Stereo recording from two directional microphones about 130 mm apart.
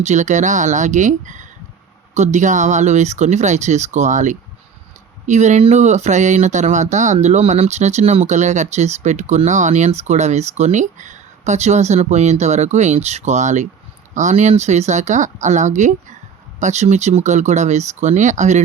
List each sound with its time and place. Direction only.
0.0 s speech: 65° right (ahead or behind)